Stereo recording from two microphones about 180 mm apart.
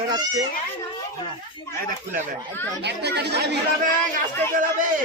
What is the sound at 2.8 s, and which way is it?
Speech, 70° right (ahead or behind).